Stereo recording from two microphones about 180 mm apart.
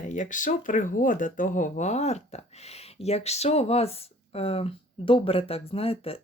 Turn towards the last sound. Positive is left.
turn(degrees=30)  # may be behind; listen again after turning